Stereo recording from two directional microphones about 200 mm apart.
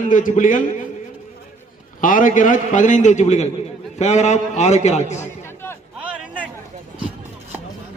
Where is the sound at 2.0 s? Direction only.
40° left (ahead or behind).